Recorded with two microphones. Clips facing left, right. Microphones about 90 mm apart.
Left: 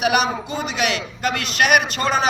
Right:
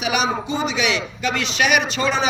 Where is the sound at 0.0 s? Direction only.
55° left (ahead or behind).